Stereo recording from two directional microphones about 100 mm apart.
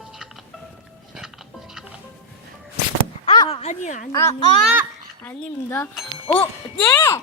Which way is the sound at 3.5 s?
90° left.